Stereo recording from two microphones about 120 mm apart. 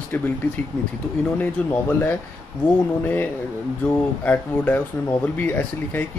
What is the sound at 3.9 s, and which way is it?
Speech, 15° left (ahead or behind).